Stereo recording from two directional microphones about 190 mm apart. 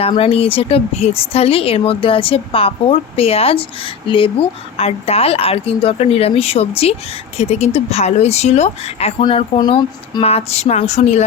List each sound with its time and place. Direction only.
0.0 s speech: 30° left (ahead or behind)